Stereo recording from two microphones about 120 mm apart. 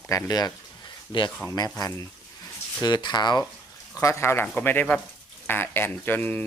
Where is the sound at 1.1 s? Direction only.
40° left (ahead or behind).